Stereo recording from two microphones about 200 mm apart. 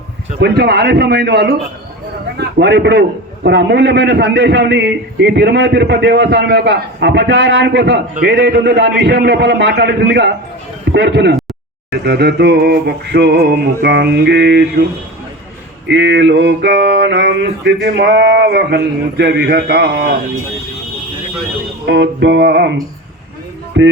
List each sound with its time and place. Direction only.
0.3 s a man's voice: 55° right (ahead or behind)
15.9 s a man's voice: 65° right (ahead or behind)
21.8 s a man's voice: 60° right (ahead or behind)
23.8 s a man's voice: 65° right (ahead or behind)